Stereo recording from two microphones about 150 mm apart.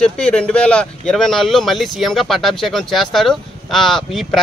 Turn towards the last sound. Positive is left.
turn(degrees=0)  # may be behind; listen again after turning